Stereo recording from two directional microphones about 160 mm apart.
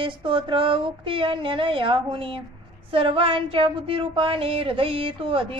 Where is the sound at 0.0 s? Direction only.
30° right (ahead or behind).